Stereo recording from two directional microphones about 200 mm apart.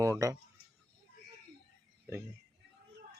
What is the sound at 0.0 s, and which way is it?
Speech, 15° right (ahead or behind).